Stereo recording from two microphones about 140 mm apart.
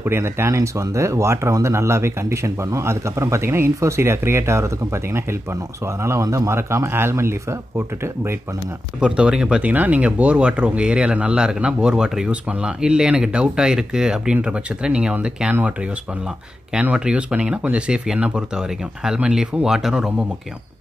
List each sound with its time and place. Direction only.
0.0 s speech: 15° right (ahead or behind)
9.0 s speech: 10° right (ahead or behind)